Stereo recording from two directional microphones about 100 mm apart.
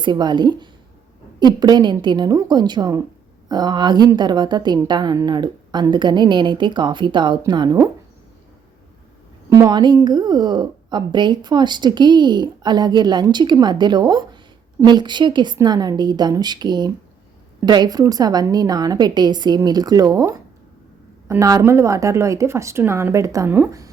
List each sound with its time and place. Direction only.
0.0 s a woman's voice: 45° right (ahead or behind)
9.5 s a woman's voice: 35° right (ahead or behind)
21.2 s a woman's voice: 35° right (ahead or behind)
23.5 s speech: 20° right (ahead or behind)